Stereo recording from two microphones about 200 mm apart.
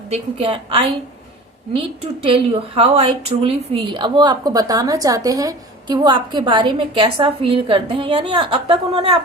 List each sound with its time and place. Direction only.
0.1 s a woman's voice: 30° right (ahead or behind)